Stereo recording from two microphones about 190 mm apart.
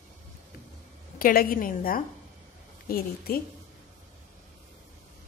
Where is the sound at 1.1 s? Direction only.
50° left (ahead or behind).